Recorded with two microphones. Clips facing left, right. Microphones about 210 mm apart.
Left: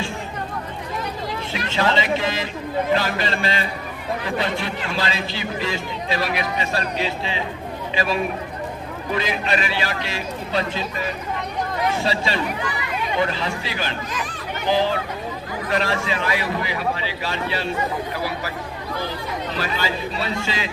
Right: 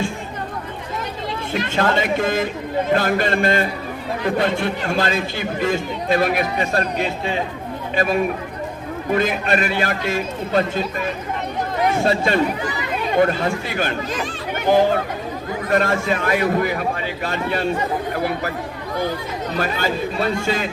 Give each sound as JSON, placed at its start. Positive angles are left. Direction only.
{"t": 1.5, "sound": "a man's voice", "side_deg": -50}
{"t": 11.9, "sound": "a man's voice", "side_deg": -50}
{"t": 19.5, "sound": "a man's voice", "side_deg": -50}